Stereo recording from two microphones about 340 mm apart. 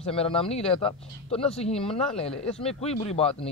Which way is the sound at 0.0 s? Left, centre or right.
Centre.